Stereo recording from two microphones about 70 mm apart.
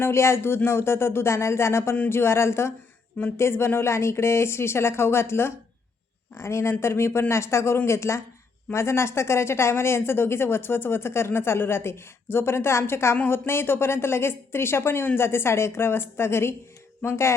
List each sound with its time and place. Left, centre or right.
0.0 s speech: left